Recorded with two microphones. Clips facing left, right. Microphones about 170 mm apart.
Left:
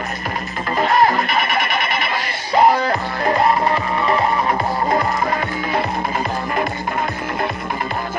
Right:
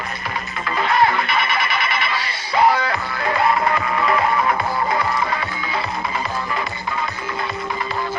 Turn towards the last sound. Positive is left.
turn(degrees=55)  # may be behind; listen again after turning